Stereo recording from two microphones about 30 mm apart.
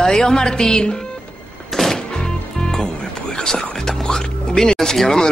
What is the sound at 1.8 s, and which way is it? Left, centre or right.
Music, centre.